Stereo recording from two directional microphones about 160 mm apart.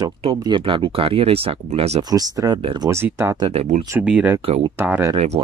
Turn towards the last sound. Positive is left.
turn(degrees=-40)  # may be behind; listen again after turning